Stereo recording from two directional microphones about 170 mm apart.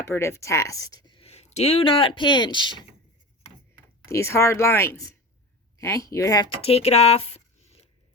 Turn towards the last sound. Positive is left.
turn(degrees=35)  # may be behind; listen again after turning